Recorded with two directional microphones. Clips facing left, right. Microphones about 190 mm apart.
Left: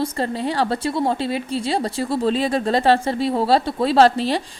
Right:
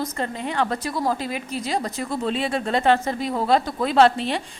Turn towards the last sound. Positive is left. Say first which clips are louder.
# left 2 dB
turn(degrees=35)  # may be behind; listen again after turning